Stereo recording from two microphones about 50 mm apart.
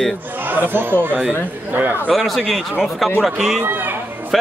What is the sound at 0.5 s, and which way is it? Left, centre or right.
Speech, right.